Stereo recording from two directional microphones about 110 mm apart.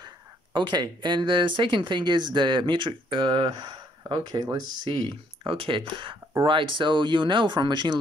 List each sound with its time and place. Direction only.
0.0 s speech: 45° right (ahead or behind)